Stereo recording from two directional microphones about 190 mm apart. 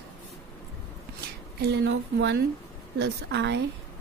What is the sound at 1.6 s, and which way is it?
A woman's voice, 60° right (ahead or behind).